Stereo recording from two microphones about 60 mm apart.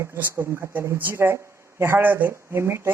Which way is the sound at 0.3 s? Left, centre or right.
Right.